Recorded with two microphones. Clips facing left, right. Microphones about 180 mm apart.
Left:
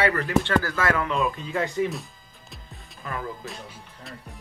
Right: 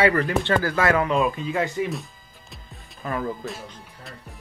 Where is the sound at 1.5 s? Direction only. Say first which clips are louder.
Right 1 dB; 5° right (ahead or behind).